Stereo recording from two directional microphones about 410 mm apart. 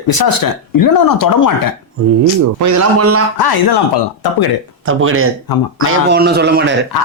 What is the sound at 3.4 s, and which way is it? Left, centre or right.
Speech, left.